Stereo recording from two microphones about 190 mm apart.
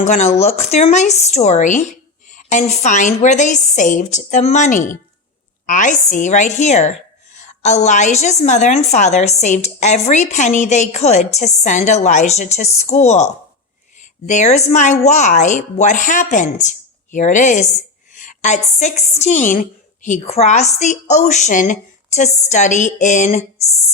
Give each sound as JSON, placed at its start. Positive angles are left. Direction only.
{"t": 0.0, "sound": "a woman's voice", "side_deg": 40}
{"t": 14.3, "sound": "a woman's voice", "side_deg": 40}